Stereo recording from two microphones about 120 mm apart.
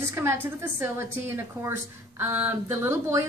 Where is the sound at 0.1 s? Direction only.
20° right (ahead or behind).